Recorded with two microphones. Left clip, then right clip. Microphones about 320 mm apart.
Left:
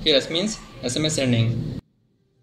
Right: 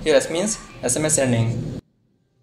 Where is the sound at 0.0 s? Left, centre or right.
Right.